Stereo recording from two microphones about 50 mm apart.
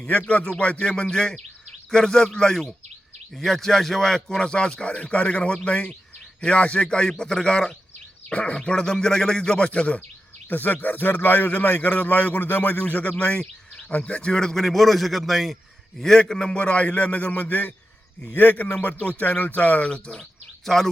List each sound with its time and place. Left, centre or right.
0.1 s a man's voice: left; by 7.8 s centre
8.3 s speech: left
10.5 s a man's voice: left; by 15.5 s centre
16.0 s a man's voice: centre; by 19.9 s left
20.7 s speech: centre